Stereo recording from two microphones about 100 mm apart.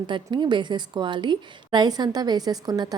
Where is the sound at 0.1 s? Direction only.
50° right (ahead or behind).